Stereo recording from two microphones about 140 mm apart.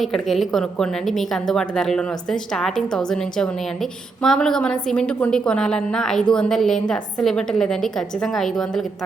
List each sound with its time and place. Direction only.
0.0 s a woman's voice: centre (ahead or behind)